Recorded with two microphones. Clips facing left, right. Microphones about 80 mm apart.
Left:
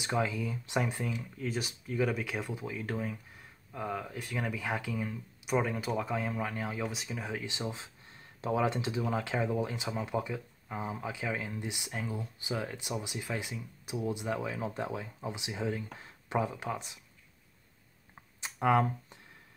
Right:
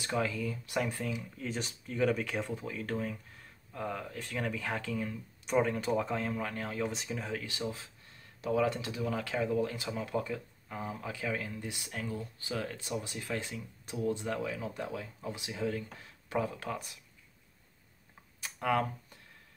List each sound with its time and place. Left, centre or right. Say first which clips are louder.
0.0 s speech: left 1 dB; centre
1.1 s speech: left 2 dB; centre
7.2 s speech: left 2 dB; centre
18.4 s speech: left 4 dB; left